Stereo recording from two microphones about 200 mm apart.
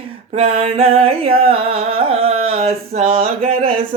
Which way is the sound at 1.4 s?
30° right (ahead or behind).